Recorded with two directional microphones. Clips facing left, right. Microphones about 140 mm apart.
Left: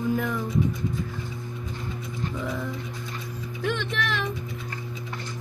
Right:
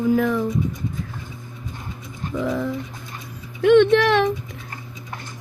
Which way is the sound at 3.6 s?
75° right (ahead or behind).